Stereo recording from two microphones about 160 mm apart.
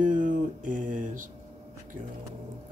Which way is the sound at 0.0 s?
50° right (ahead or behind).